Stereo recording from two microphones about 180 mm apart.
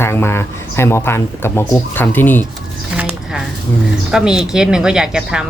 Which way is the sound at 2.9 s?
10° right (ahead or behind).